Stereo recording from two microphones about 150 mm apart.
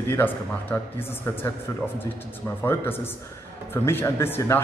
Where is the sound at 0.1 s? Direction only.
15° left (ahead or behind).